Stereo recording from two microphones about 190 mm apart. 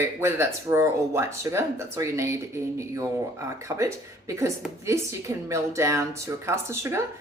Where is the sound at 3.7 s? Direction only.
25° right (ahead or behind).